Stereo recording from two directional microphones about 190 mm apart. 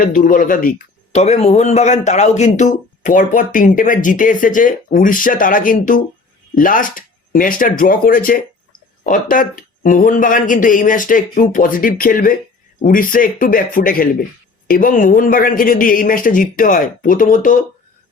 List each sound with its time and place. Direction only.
0.0 s speech: 45° left (ahead or behind)
1.1 s speech: 35° left (ahead or behind)